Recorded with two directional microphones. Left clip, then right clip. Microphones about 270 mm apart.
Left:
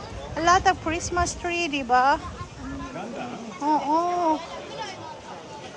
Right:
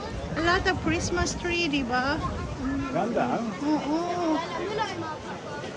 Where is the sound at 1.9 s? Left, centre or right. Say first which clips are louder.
Left 11 dB; left.